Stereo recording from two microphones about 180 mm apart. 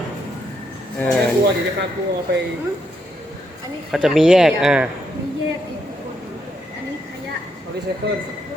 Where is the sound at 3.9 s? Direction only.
5° right (ahead or behind).